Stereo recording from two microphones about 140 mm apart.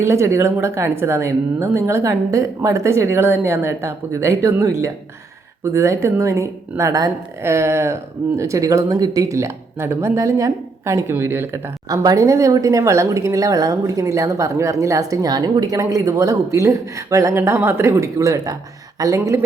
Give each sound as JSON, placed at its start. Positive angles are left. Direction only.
{"t": 0.0, "sound": "speech", "side_deg": -20}